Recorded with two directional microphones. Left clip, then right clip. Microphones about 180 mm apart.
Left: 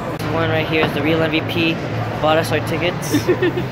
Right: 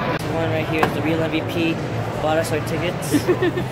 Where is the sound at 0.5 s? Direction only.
30° left (ahead or behind).